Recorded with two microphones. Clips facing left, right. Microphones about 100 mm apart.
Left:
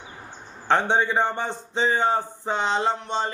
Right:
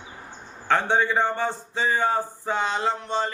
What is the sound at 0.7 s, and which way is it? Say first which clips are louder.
A man's voice: left 1 dB; 20° left (ahead or behind).